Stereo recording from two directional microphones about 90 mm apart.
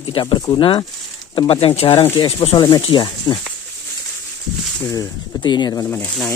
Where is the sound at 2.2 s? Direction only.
65° left (ahead or behind).